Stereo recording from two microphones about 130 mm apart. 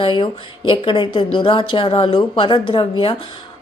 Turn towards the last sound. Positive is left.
turn(degrees=40)  # may be behind; listen again after turning